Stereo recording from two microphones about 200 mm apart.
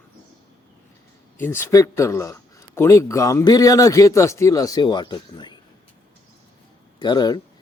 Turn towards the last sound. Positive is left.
turn(degrees=20)  # may be behind; listen again after turning